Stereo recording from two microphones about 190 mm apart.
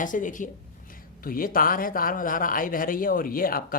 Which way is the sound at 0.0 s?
45° left (ahead or behind).